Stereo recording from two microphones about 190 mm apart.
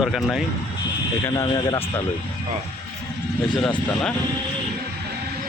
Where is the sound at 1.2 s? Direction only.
20° left (ahead or behind).